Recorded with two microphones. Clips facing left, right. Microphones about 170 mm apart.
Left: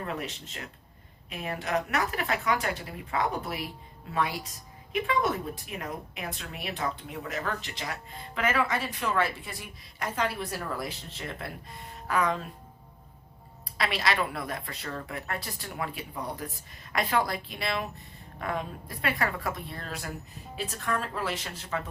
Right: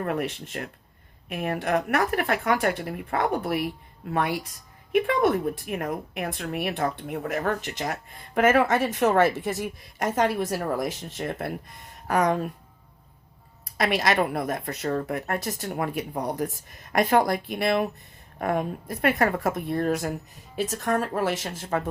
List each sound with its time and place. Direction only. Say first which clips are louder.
0.0 s a woman's voice: right 7 dB; 55° right (ahead or behind)
13.7 s a woman's voice: right 6 dB; 45° right (ahead or behind)